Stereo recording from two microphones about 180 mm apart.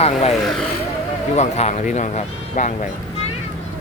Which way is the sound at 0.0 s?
35° left (ahead or behind).